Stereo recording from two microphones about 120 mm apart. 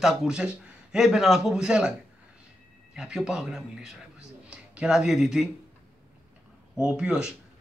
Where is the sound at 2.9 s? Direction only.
5° right (ahead or behind).